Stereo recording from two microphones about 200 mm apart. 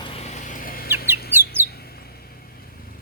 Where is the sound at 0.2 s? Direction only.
40° left (ahead or behind).